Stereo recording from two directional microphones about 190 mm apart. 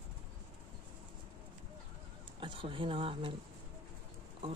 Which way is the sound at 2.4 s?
25° right (ahead or behind).